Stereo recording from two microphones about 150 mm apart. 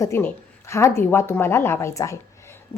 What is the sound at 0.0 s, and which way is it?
A woman's voice, 15° left (ahead or behind).